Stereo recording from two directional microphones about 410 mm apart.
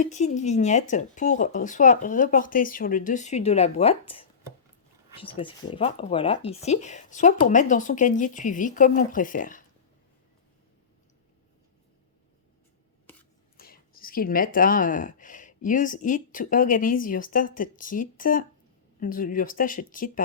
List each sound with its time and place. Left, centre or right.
0.0 s speech: centre
5.4 s speech: centre
13.1 s scissors: centre
13.6 s speech: left